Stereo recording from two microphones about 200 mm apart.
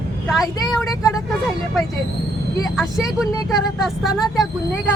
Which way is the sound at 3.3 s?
15° left (ahead or behind).